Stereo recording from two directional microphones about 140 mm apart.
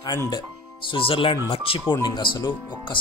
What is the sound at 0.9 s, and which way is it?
Speech, 40° left (ahead or behind).